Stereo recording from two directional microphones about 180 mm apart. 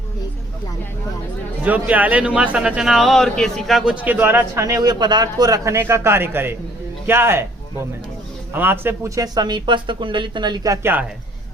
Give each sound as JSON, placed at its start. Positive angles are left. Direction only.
{"t": 1.6, "sound": "speech", "side_deg": -10}